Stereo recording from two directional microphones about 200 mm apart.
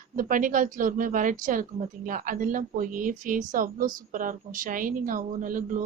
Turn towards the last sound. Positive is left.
turn(degrees=-40)  # may be behind; listen again after turning